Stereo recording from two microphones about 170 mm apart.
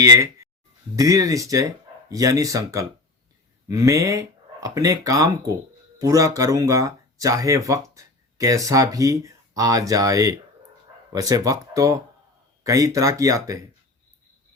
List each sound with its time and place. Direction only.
0.0 s speech: 20° right (ahead or behind)